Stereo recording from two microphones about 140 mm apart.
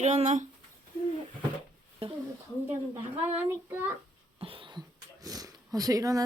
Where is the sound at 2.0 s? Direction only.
45° right (ahead or behind).